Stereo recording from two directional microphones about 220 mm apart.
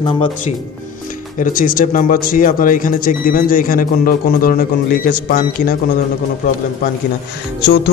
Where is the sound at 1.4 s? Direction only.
40° left (ahead or behind).